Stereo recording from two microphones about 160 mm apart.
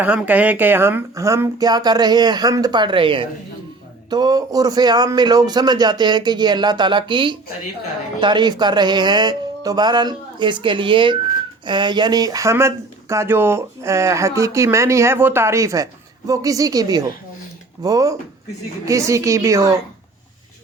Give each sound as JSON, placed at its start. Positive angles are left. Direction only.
{"t": 0.0, "sound": "speech", "side_deg": -10}